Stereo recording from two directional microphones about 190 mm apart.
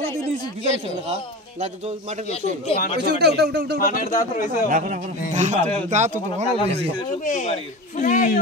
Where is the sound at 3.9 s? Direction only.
45° left (ahead or behind).